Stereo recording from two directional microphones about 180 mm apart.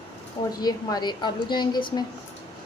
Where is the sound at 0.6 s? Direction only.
20° left (ahead or behind).